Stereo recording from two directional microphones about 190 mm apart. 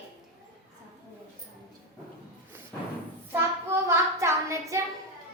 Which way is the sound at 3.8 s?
15° right (ahead or behind).